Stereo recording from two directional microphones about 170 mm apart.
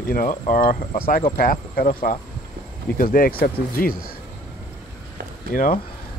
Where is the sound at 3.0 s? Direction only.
55° left (ahead or behind).